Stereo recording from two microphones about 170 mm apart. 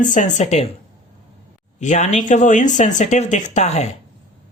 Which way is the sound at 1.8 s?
45° left (ahead or behind).